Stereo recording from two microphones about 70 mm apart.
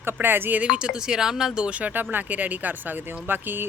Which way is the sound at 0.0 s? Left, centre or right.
Right.